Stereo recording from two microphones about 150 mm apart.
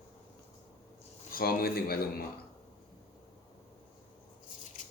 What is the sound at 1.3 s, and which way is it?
Speech, 80° left.